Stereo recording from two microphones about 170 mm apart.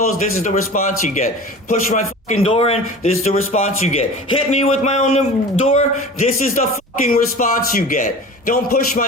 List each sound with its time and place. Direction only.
0.0 s a man's voice: 45° left (ahead or behind)